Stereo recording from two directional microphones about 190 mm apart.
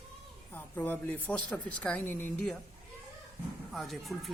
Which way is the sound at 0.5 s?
10° left (ahead or behind).